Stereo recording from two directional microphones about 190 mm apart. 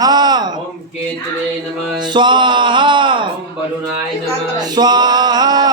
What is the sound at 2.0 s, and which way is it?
Music, 25° right (ahead or behind).